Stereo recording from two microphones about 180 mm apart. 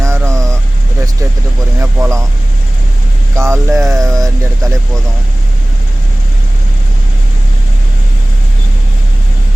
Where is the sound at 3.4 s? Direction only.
15° right (ahead or behind).